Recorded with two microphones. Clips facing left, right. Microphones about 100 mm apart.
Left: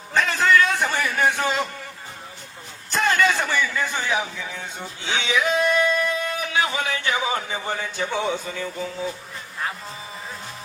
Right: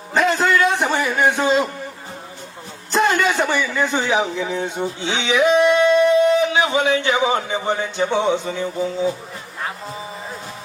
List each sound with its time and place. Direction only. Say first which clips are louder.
0.1 s a man's voice: right 2 dB; 20° right (ahead or behind)
2.9 s a man's voice: right 3 dB; 20° right (ahead or behind)